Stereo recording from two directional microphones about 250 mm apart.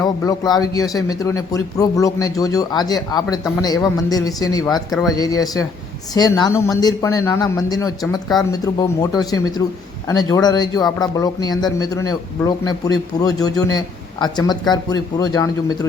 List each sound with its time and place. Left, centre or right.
0.0 s speech: centre